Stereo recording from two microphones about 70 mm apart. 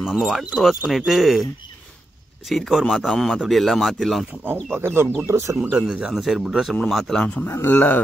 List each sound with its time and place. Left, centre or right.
0.1 s speech: centre
2.5 s speech: centre
4.7 s speech: right
5.2 s speech: right
5.6 s speech: centre
7.4 s a man's voice: left